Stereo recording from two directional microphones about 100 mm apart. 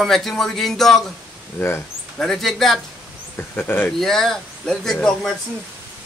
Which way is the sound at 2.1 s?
5° left (ahead or behind).